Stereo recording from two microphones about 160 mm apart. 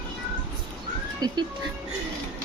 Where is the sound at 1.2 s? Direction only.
25° right (ahead or behind).